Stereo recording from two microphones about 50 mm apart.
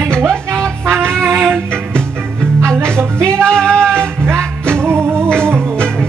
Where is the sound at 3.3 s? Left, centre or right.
Centre.